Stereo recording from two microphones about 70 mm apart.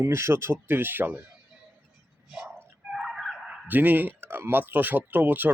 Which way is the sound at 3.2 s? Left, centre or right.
Centre.